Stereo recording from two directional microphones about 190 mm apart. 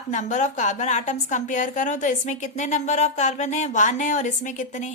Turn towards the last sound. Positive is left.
turn(degrees=40)  # may be behind; listen again after turning